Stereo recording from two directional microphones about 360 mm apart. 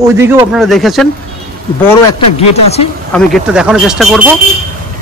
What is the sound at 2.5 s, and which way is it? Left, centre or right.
Speech, centre.